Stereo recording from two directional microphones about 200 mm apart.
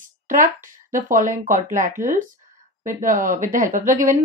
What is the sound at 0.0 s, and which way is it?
Speech, 40° right (ahead or behind).